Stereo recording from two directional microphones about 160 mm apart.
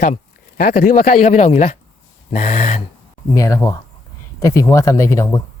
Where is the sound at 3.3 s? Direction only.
20° left (ahead or behind).